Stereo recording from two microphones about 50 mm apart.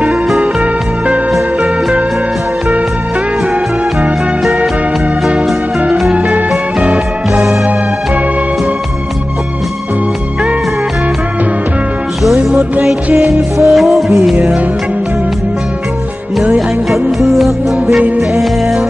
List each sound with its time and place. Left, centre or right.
6.1 s music: right
13.7 s music: centre
16.5 s music: centre